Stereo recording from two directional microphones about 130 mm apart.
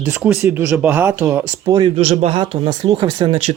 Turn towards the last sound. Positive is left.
turn(degrees=-35)  # may be behind; listen again after turning